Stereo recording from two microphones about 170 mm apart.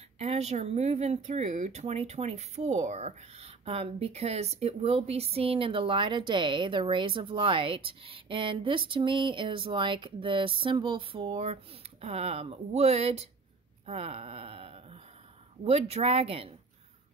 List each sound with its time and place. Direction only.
0.2 s speech: 40° right (ahead or behind)